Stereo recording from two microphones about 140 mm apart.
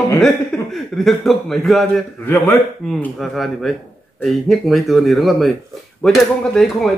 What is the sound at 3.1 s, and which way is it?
A man's voice, centre (ahead or behind).